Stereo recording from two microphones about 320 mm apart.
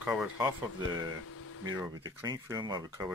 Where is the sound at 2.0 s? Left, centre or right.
Centre.